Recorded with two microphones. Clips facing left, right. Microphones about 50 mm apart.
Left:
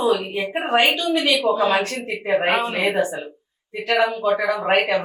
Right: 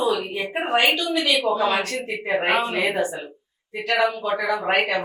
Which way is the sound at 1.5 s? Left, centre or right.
Centre.